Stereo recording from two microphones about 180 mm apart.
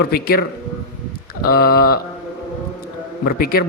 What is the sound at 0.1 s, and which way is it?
A man's voice, 60° left (ahead or behind).